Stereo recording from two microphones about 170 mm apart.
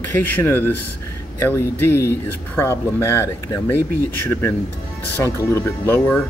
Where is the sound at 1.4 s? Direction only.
15° left (ahead or behind).